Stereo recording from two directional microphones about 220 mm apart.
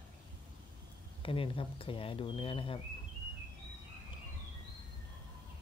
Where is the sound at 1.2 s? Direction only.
25° left (ahead or behind).